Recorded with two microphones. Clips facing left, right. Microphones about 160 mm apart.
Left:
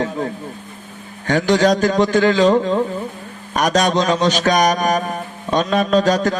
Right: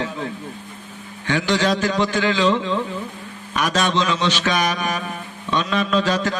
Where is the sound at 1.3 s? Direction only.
45° left (ahead or behind).